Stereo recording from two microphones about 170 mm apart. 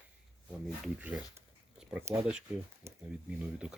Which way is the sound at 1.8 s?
10° right (ahead or behind).